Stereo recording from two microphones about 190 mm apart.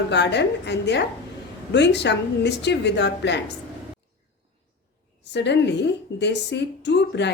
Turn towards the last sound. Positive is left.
turn(degrees=65)  # may be behind; listen again after turning